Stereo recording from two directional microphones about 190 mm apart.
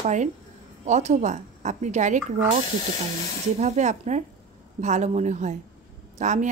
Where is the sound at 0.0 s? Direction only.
40° right (ahead or behind).